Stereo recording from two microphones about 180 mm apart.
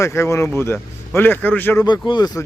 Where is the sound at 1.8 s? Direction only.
25° left (ahead or behind).